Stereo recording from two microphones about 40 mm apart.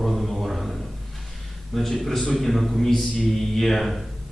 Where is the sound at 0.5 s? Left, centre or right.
Centre.